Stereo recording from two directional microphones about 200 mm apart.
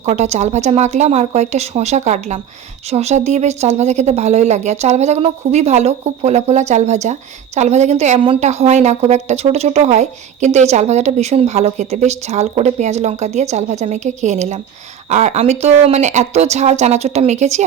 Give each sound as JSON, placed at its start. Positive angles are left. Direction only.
{"t": 0.0, "sound": "a woman's voice", "side_deg": -35}